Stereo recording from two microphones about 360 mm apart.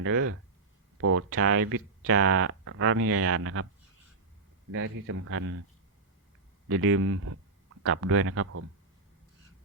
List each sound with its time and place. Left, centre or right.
0.0 s speech: right
4.7 s speech: right
6.7 s speech: right